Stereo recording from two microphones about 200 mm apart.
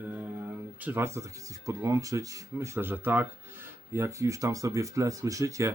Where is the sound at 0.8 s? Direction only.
10° right (ahead or behind).